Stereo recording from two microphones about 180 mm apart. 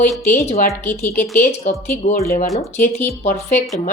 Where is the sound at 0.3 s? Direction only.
55° left (ahead or behind).